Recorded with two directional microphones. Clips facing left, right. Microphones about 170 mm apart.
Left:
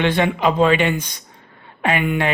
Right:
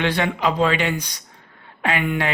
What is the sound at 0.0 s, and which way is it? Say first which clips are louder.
A woman's voice: left 3 dB; 20° left (ahead or behind).